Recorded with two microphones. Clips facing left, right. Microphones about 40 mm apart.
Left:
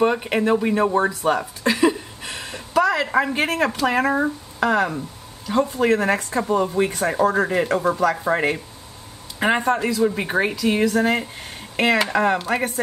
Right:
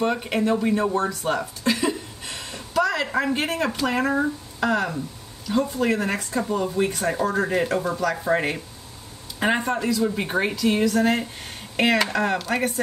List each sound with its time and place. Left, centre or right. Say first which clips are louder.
0.0 s speech: left 4 dB; centre
1.7 s a sound: left 5 dB; centre
3.3 s speech: left 3 dB; centre